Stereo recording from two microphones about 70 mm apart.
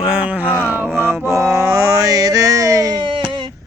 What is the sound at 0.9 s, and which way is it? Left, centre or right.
Music, right.